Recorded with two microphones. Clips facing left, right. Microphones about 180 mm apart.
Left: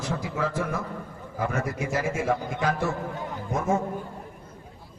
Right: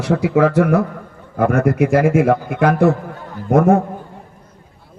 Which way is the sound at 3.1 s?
20° left (ahead or behind).